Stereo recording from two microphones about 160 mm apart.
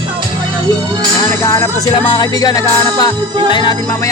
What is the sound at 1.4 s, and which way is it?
Music, 20° left (ahead or behind).